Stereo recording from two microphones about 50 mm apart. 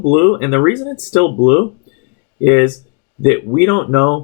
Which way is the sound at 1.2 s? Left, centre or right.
Centre.